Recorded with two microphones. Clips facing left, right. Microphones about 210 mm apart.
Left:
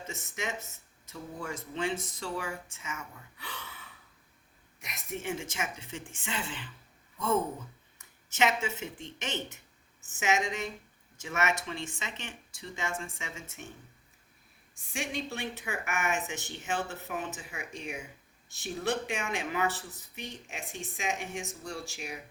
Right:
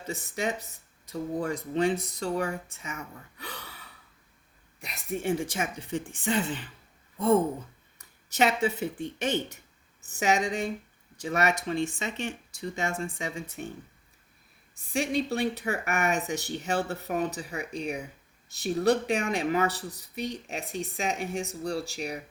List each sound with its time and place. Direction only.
0.1 s speech: 35° right (ahead or behind)
7.9 s a sound: 35° right (ahead or behind)
10.1 s speech: 35° right (ahead or behind)
14.9 s speech: 35° right (ahead or behind)